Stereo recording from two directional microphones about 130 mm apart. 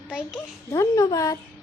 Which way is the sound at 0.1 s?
5° right (ahead or behind).